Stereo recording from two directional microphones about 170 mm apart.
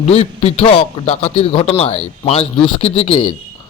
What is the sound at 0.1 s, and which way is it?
A man's voice, 35° left (ahead or behind).